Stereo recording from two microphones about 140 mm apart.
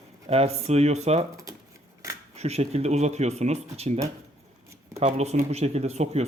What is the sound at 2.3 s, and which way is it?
Speech, 50° right (ahead or behind).